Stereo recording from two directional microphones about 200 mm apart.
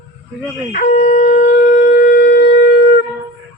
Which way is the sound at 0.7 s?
35° left (ahead or behind).